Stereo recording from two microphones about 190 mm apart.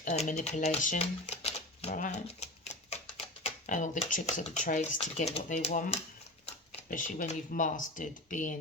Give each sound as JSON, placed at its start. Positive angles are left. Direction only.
{"t": 0.0, "sound": "speech", "side_deg": 40}
{"t": 2.4, "sound": "typewriter", "side_deg": 35}
{"t": 3.4, "sound": "speech", "side_deg": 40}